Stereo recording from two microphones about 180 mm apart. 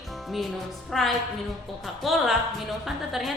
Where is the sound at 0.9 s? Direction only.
Centre (ahead or behind).